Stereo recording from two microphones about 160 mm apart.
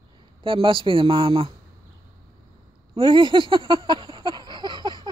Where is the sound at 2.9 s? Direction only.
30° right (ahead or behind).